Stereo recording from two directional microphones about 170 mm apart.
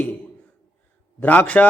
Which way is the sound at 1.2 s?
10° left (ahead or behind).